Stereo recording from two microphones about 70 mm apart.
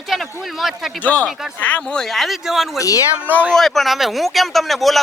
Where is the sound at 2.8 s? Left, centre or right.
Left.